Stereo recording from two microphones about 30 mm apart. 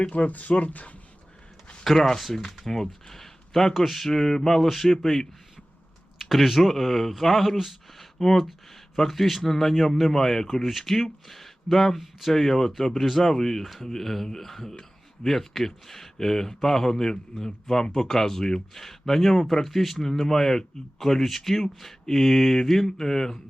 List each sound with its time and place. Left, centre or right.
0.3 s speech: left
1.8 s speech: centre
6.1 s speech: centre